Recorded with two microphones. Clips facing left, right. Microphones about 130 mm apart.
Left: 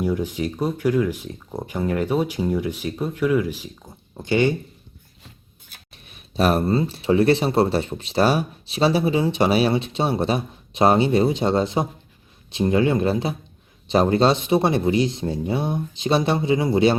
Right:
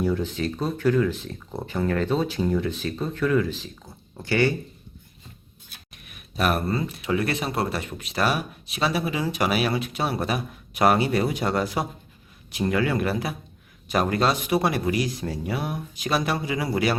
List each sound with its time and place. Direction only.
0.0 s speech: 15° left (ahead or behind)
6.1 s speech: 30° left (ahead or behind)